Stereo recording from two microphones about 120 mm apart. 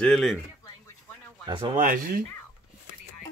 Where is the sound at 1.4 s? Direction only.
40° right (ahead or behind).